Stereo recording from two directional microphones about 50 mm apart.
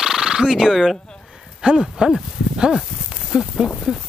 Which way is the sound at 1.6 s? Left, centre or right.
Centre.